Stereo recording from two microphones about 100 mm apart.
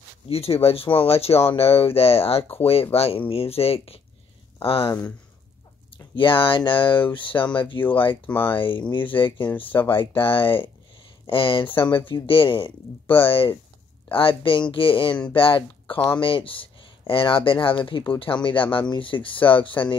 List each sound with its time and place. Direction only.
0.3 s speech: 80° left
6.1 s speech: 60° left (ahead or behind)
8.3 s speech: 20° left (ahead or behind)
8.5 s speech: 60° left (ahead or behind)
9.1 s speech: 20° left (ahead or behind)
9.9 s speech: 65° left (ahead or behind)
13.3 s speech: 65° left (ahead or behind)
15.9 s speech: 15° left (ahead or behind)
16.2 s speech: 60° left (ahead or behind)